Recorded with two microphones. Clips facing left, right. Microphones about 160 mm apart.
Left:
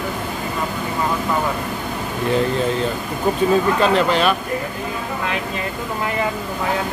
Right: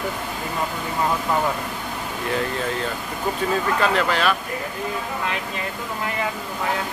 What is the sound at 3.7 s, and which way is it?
Speech, 20° left (ahead or behind).